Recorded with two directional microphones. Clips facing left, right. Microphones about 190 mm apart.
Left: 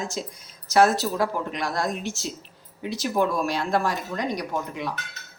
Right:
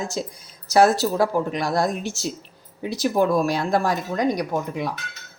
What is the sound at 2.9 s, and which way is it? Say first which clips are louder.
Speech: right 4 dB; 35° right (ahead or behind).